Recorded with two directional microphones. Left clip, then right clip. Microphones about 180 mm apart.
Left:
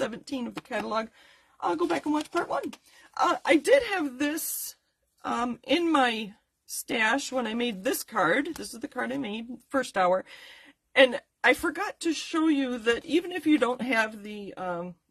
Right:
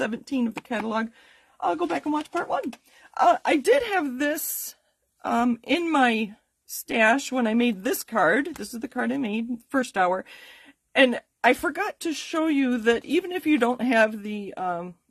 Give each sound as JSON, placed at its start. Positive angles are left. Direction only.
{"t": 0.0, "sound": "speech", "side_deg": -40}
{"t": 1.6, "sound": "speech", "side_deg": -35}
{"t": 3.2, "sound": "a woman's voice", "side_deg": -40}